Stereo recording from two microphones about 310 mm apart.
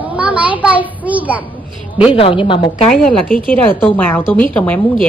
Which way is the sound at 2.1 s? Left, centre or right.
Centre.